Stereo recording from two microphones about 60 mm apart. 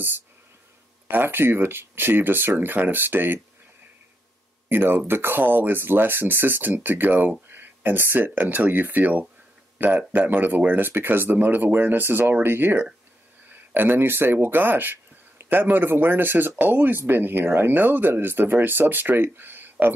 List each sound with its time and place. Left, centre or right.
1.0 s speech: right
4.6 s speech: right